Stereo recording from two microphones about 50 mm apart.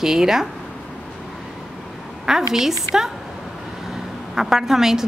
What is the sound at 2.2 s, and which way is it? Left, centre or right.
A woman's voice, centre.